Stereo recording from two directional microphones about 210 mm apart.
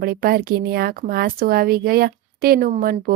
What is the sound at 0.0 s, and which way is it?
Speech, 45° right (ahead or behind).